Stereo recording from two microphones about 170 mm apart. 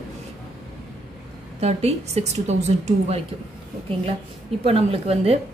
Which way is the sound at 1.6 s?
40° right (ahead or behind).